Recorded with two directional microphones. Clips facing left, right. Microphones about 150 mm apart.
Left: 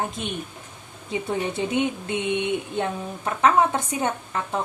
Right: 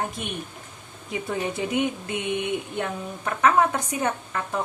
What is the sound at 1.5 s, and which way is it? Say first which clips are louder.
Speech: even; 25° left (ahead or behind).